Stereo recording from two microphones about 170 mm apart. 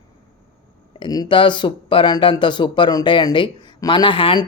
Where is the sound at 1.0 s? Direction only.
25° left (ahead or behind).